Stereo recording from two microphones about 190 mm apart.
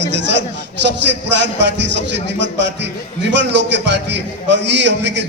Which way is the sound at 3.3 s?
70° right (ahead or behind).